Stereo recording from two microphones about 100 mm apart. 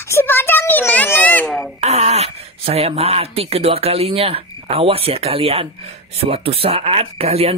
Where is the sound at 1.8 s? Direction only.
90° right.